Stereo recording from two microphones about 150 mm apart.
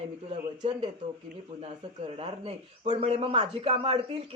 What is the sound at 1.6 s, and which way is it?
Speech, 40° right (ahead or behind).